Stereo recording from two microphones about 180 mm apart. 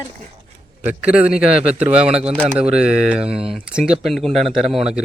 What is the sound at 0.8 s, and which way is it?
Speech, 5° right (ahead or behind).